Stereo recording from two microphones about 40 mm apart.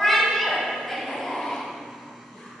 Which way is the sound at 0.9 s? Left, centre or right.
Centre.